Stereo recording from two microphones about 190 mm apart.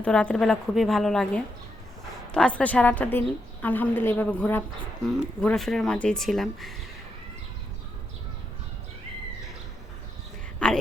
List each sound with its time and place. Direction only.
0.0 s a woman's voice: 5° left (ahead or behind)
10.6 s speech: 5° left (ahead or behind)